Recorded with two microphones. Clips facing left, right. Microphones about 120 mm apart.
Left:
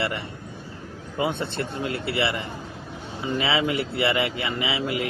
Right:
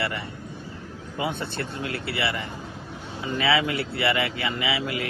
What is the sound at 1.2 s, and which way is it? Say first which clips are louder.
Speech: left 3 dB; 25° left (ahead or behind).